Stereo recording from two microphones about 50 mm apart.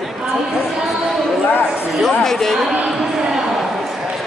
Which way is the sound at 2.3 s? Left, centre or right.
Centre.